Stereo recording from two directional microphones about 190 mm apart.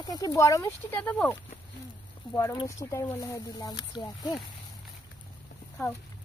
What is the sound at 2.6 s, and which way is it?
Speech, 15° left (ahead or behind).